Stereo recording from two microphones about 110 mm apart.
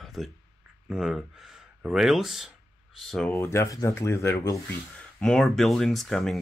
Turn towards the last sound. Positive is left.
turn(degrees=5)  # may be behind; listen again after turning